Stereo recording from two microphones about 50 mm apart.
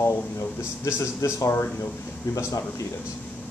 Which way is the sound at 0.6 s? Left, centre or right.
Left.